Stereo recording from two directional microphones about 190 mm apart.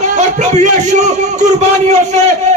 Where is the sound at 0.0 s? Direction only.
35° right (ahead or behind).